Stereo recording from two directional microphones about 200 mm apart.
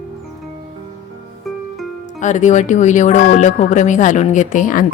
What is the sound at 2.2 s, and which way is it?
Speech, 40° left (ahead or behind).